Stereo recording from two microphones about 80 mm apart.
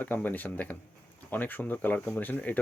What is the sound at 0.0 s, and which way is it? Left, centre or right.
Speech, left.